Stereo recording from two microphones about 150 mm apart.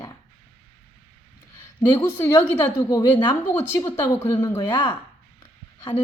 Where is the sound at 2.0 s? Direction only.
20° left (ahead or behind).